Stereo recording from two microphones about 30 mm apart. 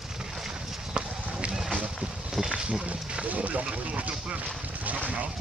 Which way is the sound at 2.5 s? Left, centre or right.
Right.